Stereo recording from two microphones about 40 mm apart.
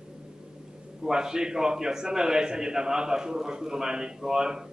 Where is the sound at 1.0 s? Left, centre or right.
Centre.